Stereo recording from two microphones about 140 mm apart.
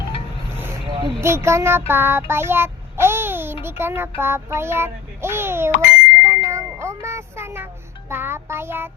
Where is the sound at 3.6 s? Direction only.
15° right (ahead or behind).